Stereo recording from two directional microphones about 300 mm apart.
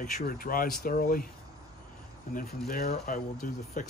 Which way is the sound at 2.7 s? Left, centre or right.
Left.